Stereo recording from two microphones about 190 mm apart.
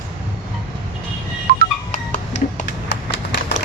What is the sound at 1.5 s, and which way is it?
Music, 55° right (ahead or behind).